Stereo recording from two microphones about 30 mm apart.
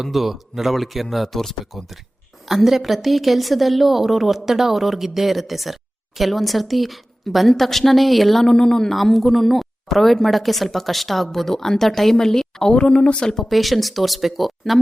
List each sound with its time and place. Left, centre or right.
0.0 s a man's voice: centre
2.6 s speech: centre
8.4 s speech: left
8.9 s speech: centre
12.8 s speech: left
13.4 s speech: centre